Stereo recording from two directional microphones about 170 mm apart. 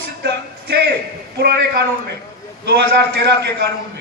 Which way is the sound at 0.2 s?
75° right (ahead or behind).